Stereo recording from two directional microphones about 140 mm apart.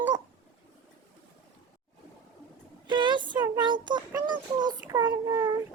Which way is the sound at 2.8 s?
35° right (ahead or behind).